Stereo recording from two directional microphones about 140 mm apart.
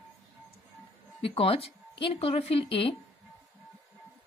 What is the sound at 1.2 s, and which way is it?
A woman's voice, 40° left (ahead or behind).